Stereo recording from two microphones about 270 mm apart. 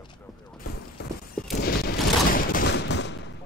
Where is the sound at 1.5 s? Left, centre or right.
Left.